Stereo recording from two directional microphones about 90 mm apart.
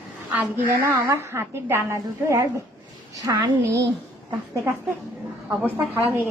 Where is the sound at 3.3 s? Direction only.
55° right (ahead or behind).